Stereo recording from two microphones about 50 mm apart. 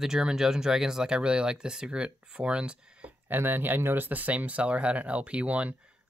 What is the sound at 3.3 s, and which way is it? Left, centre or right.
Speech, right.